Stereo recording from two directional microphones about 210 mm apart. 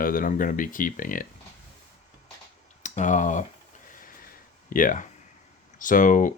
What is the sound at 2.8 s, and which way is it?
Speech, 35° left (ahead or behind).